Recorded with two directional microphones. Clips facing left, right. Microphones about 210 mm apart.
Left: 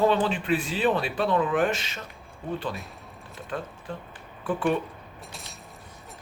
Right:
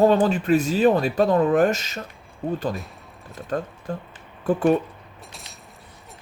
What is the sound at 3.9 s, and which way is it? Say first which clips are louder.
Speech: right 5 dB; 45° right (ahead or behind).